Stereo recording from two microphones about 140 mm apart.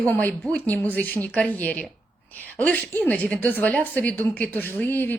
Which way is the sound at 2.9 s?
10° left (ahead or behind).